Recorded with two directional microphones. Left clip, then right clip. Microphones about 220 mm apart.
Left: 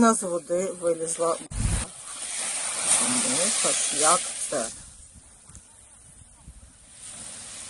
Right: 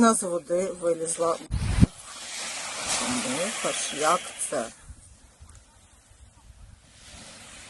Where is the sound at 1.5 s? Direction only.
40° right (ahead or behind).